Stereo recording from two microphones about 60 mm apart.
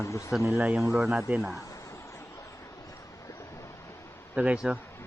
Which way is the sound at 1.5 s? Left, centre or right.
Left.